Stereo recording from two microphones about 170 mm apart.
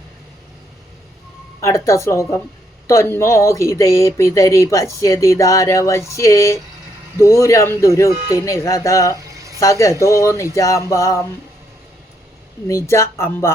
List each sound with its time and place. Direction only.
1.6 s speech: 20° left (ahead or behind)
12.6 s speech: 15° left (ahead or behind)